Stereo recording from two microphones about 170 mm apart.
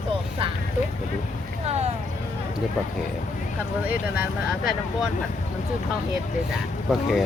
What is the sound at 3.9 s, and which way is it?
Speech, 10° right (ahead or behind).